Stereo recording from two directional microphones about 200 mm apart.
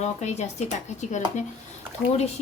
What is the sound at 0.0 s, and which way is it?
Speech, 35° left (ahead or behind).